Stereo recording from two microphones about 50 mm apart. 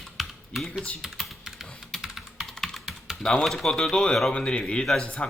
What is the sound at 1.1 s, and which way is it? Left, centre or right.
Typing, centre.